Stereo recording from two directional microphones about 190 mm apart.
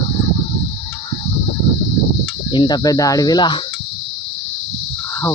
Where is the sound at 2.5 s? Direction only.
25° left (ahead or behind).